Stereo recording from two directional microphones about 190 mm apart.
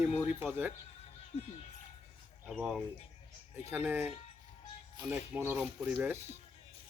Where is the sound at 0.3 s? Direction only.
10° right (ahead or behind).